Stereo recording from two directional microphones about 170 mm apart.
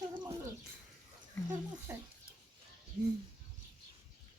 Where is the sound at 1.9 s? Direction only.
10° right (ahead or behind).